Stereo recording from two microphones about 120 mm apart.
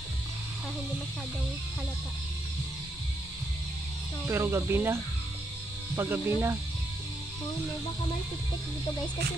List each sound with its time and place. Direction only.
4.3 s speech: 20° right (ahead or behind)